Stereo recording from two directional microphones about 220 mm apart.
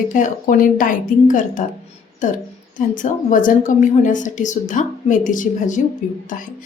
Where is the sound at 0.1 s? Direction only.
35° left (ahead or behind).